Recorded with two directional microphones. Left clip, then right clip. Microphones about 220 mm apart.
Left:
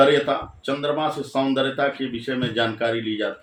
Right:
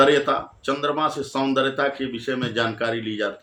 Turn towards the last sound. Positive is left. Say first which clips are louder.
# left 1 dB
turn(degrees=-20)  # may be behind; listen again after turning